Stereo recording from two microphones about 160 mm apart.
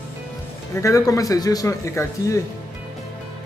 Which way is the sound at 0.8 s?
20° left (ahead or behind).